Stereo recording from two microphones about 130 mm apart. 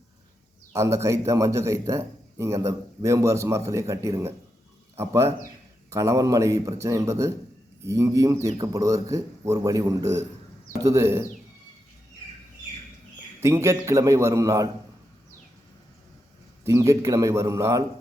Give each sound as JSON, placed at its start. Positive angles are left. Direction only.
{"t": 0.7, "sound": "a man's voice", "side_deg": -20}
{"t": 13.4, "sound": "a man's voice", "side_deg": -20}
{"t": 16.6, "sound": "a man's voice", "side_deg": -20}